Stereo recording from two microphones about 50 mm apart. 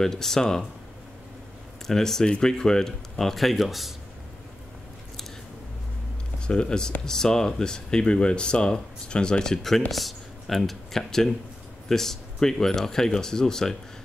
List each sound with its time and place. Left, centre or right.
0.0 s speech: centre
1.9 s speech: centre
6.4 s speech: centre